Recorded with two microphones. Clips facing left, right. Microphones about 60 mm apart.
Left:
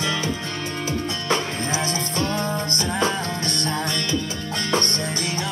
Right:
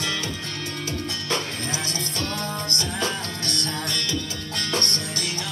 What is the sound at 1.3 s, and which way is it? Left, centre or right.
Music, left.